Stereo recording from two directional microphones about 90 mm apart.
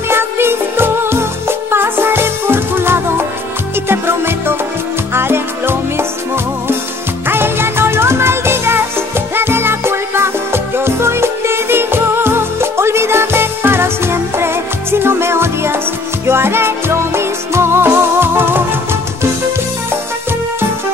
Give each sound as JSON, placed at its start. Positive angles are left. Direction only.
{"t": 0.1, "sound": "music", "side_deg": -25}